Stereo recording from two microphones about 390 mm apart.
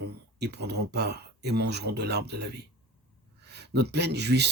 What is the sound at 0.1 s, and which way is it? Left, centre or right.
Speech, right.